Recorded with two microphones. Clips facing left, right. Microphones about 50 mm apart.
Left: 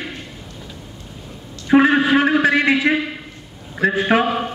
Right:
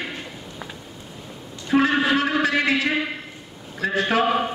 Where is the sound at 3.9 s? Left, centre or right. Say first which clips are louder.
Left 4 dB; centre.